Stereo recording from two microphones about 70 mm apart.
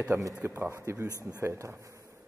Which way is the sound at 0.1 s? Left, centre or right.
Right.